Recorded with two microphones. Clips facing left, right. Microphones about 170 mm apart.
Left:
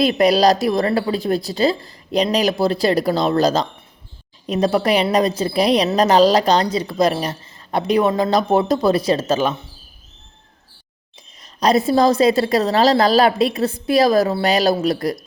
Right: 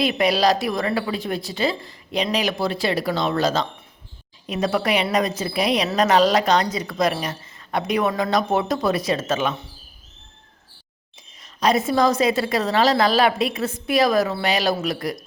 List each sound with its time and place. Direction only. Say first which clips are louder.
0.0 s a woman's voice: left 5 dB; 40° left (ahead or behind)
11.6 s a woman's voice: left 4 dB; 35° left (ahead or behind)